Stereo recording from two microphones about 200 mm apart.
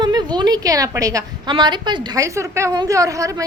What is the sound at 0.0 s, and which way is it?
A woman's voice, 20° right (ahead or behind).